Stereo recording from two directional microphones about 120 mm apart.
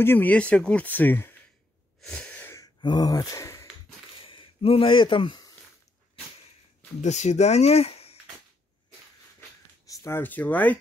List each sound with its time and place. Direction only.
0.0 s speech: 15° left (ahead or behind)
2.0 s a sound: 10° left (ahead or behind)
2.8 s speech: 35° left (ahead or behind)
4.2 s a sound: 45° left (ahead or behind)
7.0 s speech: 70° left (ahead or behind)
9.8 s speech: 25° left (ahead or behind)